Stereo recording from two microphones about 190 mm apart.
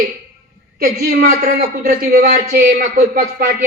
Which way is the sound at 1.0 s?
55° right (ahead or behind).